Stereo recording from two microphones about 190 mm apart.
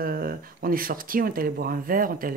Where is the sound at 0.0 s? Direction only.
50° right (ahead or behind).